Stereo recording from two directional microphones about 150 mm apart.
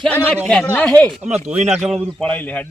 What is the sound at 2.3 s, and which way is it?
Speech, 10° left (ahead or behind).